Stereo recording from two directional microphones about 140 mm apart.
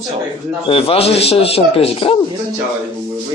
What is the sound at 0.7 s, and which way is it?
A man's voice, 40° left (ahead or behind).